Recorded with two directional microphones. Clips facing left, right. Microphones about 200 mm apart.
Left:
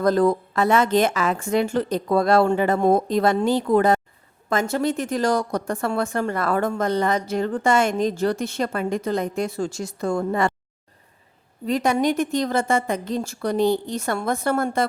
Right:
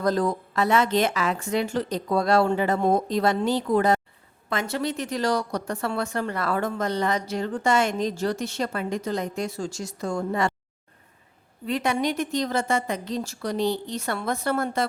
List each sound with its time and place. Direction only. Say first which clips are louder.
0.0 s a woman's voice: left 5 dB; 55° left (ahead or behind)
11.6 s a woman's voice: left 4 dB; 40° left (ahead or behind)